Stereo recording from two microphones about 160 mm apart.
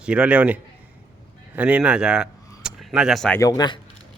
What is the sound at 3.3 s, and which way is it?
Speech, 20° left (ahead or behind).